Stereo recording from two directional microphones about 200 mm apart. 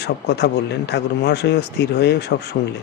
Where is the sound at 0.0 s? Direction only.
60° left (ahead or behind).